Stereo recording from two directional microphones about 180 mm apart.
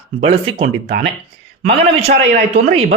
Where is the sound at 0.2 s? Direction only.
35° right (ahead or behind).